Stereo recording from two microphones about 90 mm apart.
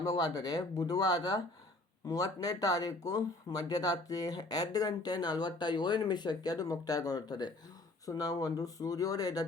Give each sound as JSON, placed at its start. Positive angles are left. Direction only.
{"t": 0.0, "sound": "speech", "side_deg": 45}